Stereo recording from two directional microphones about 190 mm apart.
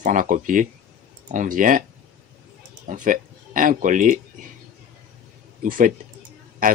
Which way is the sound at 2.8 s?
45° right (ahead or behind).